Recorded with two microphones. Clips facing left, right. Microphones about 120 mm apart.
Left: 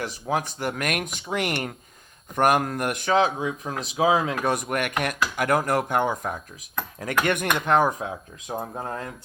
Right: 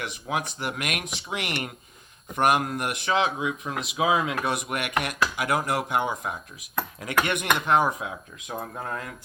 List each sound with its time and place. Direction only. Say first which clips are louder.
0.0 s speech: left 3 dB; 40° left (ahead or behind)